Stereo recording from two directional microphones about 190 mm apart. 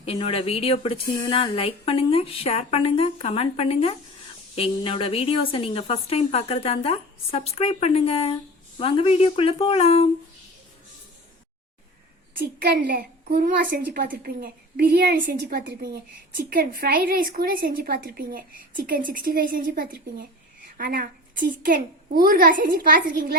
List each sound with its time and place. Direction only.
0.0 s a woman's voice: 30° left (ahead or behind)
12.4 s a woman's voice: 55° right (ahead or behind)